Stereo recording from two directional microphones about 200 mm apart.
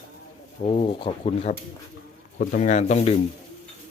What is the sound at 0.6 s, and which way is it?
A man's voice, 25° left (ahead or behind).